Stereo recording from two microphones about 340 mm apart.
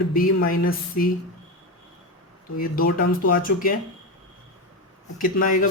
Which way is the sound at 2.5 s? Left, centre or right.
Left.